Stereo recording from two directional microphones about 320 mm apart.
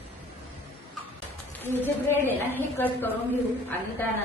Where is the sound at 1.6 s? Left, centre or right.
Centre.